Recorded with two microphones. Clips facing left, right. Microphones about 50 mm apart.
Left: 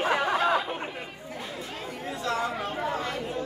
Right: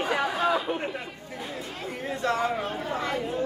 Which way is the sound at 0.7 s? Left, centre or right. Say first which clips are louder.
Right 4 dB; centre.